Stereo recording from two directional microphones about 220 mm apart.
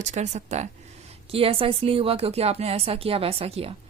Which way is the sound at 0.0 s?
30° right (ahead or behind).